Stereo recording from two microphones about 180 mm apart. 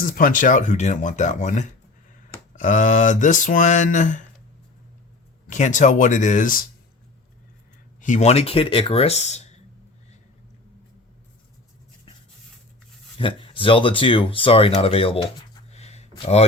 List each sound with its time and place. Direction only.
0.0 s speech: 50° left (ahead or behind)
5.5 s speech: 45° left (ahead or behind)
8.0 s speech: 40° left (ahead or behind)
13.1 s speech: 30° left (ahead or behind)
15.7 s a sound: 35° left (ahead or behind)